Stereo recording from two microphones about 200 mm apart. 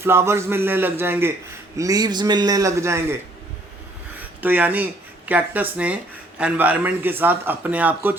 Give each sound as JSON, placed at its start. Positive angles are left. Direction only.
{"t": 0.0, "sound": "a man's voice", "side_deg": -10}
{"t": 4.4, "sound": "a man's voice", "side_deg": -10}